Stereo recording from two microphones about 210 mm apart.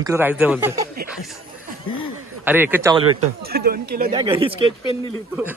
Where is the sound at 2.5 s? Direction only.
10° right (ahead or behind).